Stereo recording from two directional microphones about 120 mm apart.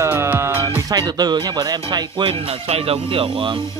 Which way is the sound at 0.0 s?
20° right (ahead or behind).